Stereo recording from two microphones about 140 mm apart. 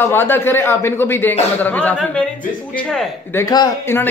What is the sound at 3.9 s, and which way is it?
Speech, 20° left (ahead or behind).